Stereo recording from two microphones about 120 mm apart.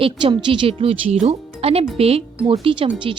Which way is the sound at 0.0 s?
45° right (ahead or behind).